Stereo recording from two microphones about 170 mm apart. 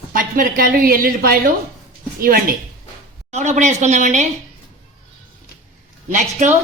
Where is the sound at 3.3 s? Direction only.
40° right (ahead or behind).